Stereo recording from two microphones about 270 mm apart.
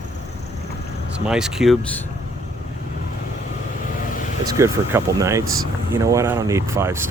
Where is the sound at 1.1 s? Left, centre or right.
Centre.